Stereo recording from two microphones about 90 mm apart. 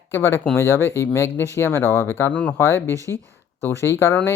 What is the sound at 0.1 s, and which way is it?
Speech, 25° left (ahead or behind).